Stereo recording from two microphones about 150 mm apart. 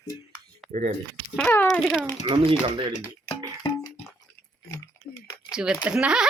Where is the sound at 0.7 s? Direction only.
50° right (ahead or behind).